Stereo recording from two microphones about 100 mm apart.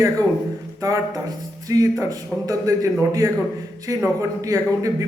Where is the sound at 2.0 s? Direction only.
35° right (ahead or behind).